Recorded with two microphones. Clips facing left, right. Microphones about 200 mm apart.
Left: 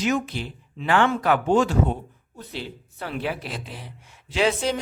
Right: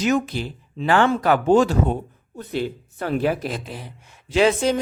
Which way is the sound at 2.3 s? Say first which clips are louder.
Right 9 dB; 50° right (ahead or behind).